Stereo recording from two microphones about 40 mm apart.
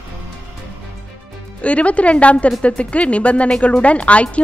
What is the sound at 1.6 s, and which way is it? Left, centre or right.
Speech, left.